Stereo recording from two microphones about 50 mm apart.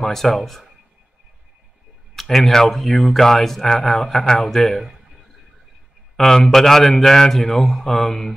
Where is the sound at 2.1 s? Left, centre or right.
Centre.